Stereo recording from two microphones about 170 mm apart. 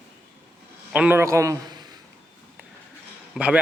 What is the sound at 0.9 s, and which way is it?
Speech, 10° right (ahead or behind).